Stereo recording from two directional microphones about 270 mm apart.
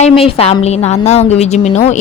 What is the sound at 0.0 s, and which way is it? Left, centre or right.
A woman's voice, left.